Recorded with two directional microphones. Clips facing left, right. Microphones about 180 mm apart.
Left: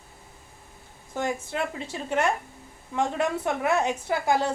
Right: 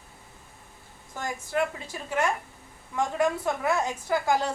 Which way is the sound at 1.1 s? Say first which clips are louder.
Left 2 dB; 25° left (ahead or behind).